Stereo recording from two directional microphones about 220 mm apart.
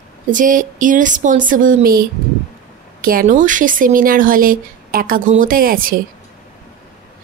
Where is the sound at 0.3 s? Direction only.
35° right (ahead or behind).